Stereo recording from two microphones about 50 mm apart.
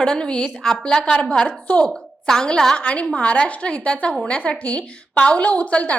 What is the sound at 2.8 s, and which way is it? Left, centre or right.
A woman's voice, left.